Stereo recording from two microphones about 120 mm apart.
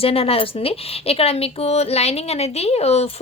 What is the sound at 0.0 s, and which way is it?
A woman's voice, 55° left (ahead or behind).